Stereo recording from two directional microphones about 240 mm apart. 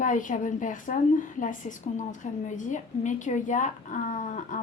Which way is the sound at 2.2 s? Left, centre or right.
Left.